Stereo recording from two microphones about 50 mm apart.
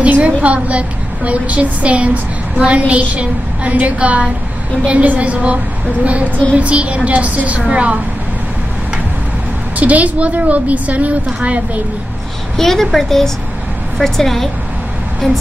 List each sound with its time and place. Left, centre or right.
0.0 s a woman's voice: right
9.8 s a woman's voice: right
12.5 s a woman's voice: centre